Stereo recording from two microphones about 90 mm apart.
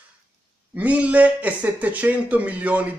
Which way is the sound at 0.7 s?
15° right (ahead or behind).